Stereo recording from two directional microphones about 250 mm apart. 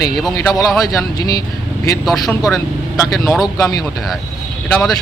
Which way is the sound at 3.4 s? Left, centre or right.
Centre.